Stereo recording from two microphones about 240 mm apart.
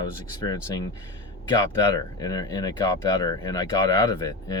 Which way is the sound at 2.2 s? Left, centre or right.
Centre.